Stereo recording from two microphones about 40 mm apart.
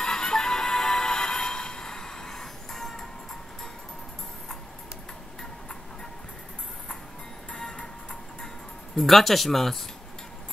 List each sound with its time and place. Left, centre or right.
0.0 s music: centre
7.5 s music: centre
8.9 s speech: centre